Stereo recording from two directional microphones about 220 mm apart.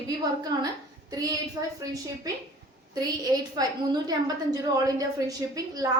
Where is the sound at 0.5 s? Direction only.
20° right (ahead or behind).